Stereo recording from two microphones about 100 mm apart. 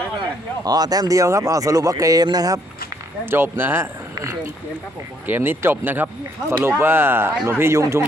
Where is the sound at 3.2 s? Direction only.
20° right (ahead or behind).